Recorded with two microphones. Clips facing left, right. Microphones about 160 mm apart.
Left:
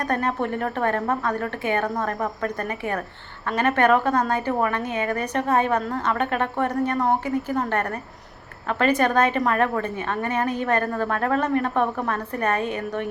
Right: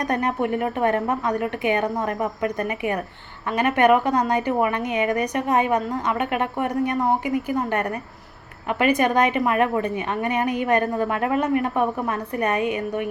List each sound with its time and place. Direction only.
0.0 s a woman's voice: 15° right (ahead or behind)